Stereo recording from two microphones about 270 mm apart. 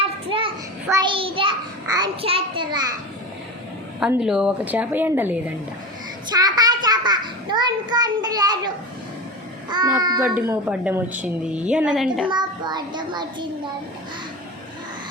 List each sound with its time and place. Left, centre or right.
0.0 s a sound: centre
4.0 s a woman's voice: centre
6.3 s child singing: centre
9.6 s a child's voice: centre
12.3 s a child's voice: centre